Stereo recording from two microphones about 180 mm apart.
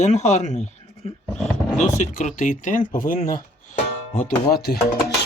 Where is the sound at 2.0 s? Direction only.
45° left (ahead or behind).